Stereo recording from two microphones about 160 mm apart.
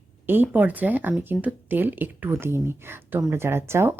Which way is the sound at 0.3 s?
10° right (ahead or behind).